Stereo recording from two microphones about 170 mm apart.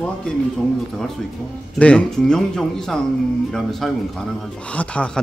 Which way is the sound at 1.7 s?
5° left (ahead or behind).